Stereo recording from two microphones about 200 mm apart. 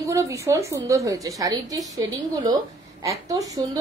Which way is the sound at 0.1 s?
15° right (ahead or behind).